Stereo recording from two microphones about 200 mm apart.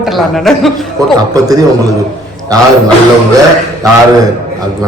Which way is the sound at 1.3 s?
15° right (ahead or behind).